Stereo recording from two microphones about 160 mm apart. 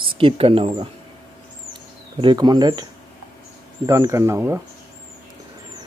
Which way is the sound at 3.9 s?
20° right (ahead or behind).